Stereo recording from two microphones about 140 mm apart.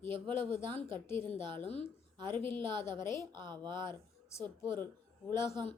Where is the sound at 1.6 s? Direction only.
50° left (ahead or behind).